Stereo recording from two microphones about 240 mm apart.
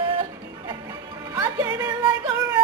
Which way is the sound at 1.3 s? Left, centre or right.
Centre.